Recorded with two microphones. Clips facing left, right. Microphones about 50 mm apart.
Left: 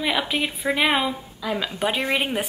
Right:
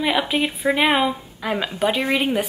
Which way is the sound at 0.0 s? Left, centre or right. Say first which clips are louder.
Right 3 dB; centre.